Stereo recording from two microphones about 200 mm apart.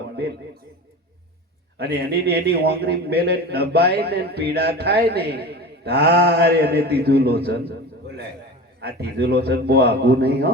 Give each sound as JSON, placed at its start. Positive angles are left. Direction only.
{"t": 1.8, "sound": "a man's voice", "side_deg": -55}
{"t": 8.8, "sound": "a man's voice", "side_deg": -55}